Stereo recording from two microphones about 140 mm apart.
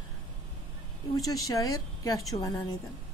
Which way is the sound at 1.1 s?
25° left (ahead or behind).